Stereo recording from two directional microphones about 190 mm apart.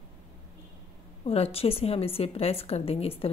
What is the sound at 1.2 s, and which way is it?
A woman's voice, 30° left (ahead or behind).